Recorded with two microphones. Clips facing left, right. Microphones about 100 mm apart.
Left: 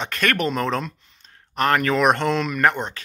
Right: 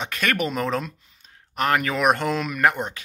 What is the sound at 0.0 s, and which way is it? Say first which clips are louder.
Speech: left 2 dB; 10° right (ahead or behind).